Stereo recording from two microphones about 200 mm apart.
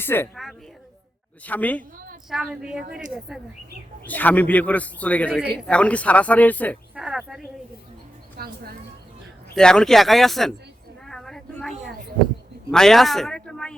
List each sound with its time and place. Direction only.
0.0 s a woman's voice: 10° left (ahead or behind)
2.3 s a man's voice: 5° right (ahead or behind)
6.9 s speech: 5° right (ahead or behind)
8.4 s speech: 50° right (ahead or behind)
9.6 s speech: 5° left (ahead or behind)
11.0 s a sound: centre (ahead or behind)
12.7 s speech: centre (ahead or behind)